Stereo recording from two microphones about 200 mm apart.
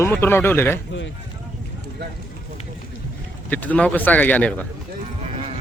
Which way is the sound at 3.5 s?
10° left (ahead or behind).